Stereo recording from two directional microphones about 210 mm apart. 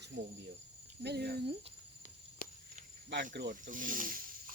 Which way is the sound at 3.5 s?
40° right (ahead or behind).